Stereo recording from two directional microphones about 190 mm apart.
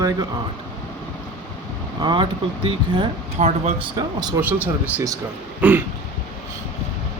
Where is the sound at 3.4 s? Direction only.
40° right (ahead or behind).